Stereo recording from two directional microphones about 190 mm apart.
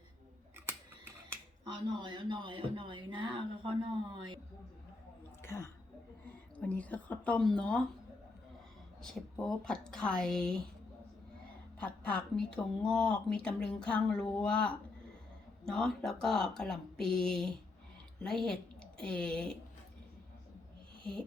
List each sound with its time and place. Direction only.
1.3 s speech: 25° right (ahead or behind)
5.4 s a sound: 15° left (ahead or behind)
6.6 s a woman's voice: 10° left (ahead or behind)
9.0 s speech: 5° left (ahead or behind)
11.8 s a woman's voice: 5° left (ahead or behind)
21.0 s music: 5° left (ahead or behind)